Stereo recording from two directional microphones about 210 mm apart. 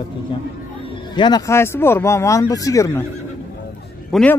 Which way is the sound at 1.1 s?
20° left (ahead or behind).